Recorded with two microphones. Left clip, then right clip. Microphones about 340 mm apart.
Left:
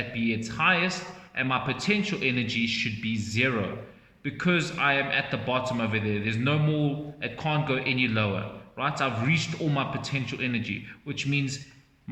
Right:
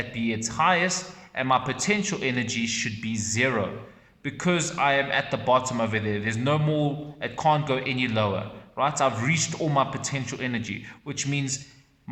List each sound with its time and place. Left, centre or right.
0.2 s a man's voice: centre